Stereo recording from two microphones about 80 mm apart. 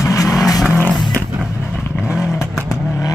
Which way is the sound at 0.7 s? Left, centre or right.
Left.